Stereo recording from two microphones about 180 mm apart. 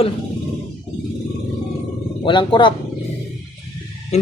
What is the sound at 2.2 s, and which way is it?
Speech, 25° left (ahead or behind).